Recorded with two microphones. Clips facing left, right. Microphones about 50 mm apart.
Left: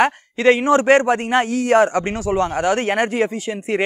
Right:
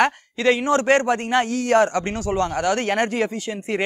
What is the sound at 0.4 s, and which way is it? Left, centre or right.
A man's voice, left.